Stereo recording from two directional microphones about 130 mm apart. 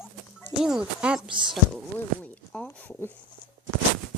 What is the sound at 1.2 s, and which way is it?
Speech, 40° right (ahead or behind).